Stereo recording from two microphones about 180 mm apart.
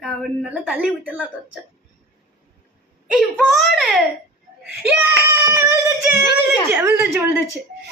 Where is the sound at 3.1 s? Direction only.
Centre (ahead or behind).